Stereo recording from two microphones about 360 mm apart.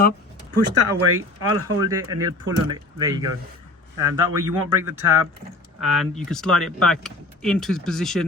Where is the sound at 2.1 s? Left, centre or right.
Centre.